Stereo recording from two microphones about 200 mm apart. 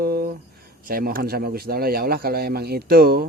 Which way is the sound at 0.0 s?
50° right (ahead or behind).